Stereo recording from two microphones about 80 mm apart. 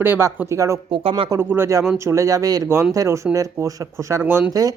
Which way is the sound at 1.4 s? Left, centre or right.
Right.